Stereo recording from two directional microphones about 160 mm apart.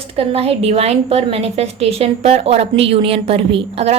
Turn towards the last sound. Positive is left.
turn(degrees=-40)  # may be behind; listen again after turning